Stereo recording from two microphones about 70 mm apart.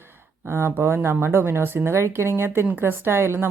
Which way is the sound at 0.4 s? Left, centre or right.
Right.